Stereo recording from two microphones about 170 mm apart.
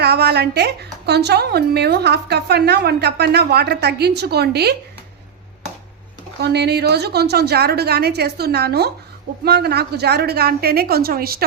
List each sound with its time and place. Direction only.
0.0 s a woman's voice: 75° right (ahead or behind)
6.4 s a woman's voice: 75° right (ahead or behind)